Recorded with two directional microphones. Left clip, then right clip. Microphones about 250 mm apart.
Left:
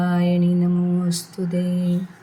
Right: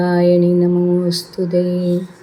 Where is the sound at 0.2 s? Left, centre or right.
Left.